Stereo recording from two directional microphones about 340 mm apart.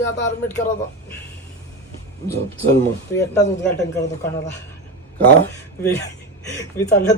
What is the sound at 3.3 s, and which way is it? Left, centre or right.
Speech, left.